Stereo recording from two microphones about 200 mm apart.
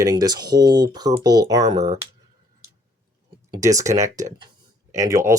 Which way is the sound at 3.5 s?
15° right (ahead or behind).